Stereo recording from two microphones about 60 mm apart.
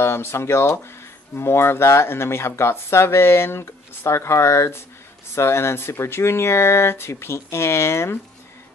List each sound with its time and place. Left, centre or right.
0.0 s speech: left